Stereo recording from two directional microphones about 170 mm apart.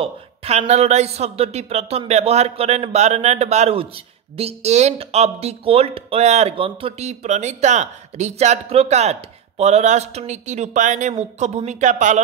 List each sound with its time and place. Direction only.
0.0 s speech: 40° right (ahead or behind)